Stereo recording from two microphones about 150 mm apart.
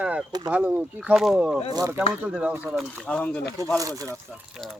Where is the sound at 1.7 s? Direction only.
20° right (ahead or behind).